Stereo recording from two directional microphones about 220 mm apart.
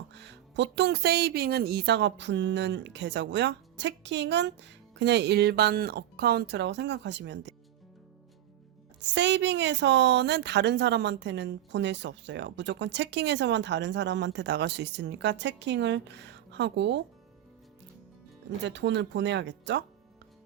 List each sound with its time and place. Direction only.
0.1 s a woman's voice: 55° right (ahead or behind)
9.0 s a woman's voice: 55° right (ahead or behind)
18.6 s a woman's voice: 55° right (ahead or behind)